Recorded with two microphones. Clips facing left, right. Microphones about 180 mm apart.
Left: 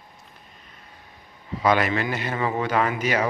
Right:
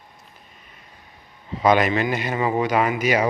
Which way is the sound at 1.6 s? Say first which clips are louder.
Right 3 dB; 20° right (ahead or behind).